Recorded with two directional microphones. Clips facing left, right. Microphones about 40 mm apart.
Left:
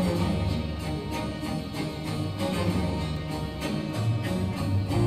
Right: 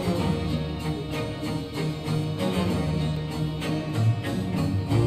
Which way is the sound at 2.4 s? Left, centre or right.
Right.